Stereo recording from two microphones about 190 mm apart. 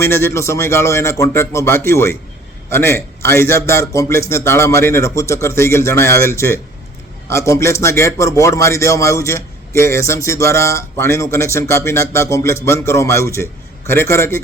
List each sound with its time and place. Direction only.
0.0 s a man's voice: 10° left (ahead or behind)